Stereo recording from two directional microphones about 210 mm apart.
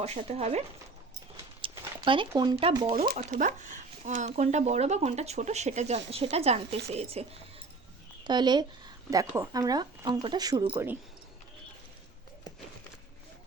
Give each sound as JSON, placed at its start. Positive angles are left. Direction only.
{"t": 0.0, "sound": "speech", "side_deg": -30}
{"t": 1.6, "sound": "speech", "side_deg": -25}
{"t": 3.1, "sound": "speech", "side_deg": -35}